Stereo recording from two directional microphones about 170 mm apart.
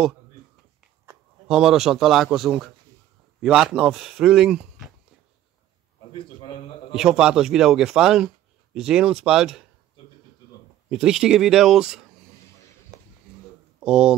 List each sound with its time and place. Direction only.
1.5 s speech: centre (ahead or behind)
6.1 s a man's voice: 30° left (ahead or behind)
7.0 s speech: 5° right (ahead or behind)
10.9 s speech: 5° right (ahead or behind)
13.7 s speech: 5° right (ahead or behind)